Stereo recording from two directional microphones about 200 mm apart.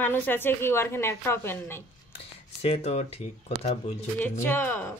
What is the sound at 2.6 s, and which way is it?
Speech, 35° left (ahead or behind).